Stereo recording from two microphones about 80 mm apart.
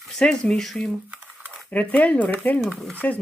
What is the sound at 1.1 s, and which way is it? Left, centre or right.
Crumpling, right.